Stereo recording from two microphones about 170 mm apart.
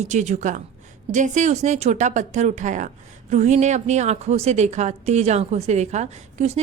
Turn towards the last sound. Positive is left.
turn(degrees=-40)  # may be behind; listen again after turning